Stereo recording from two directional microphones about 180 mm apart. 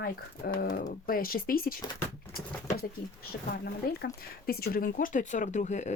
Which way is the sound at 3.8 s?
60° left (ahead or behind).